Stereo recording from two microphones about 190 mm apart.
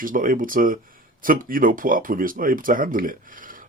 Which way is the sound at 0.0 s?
45° right (ahead or behind).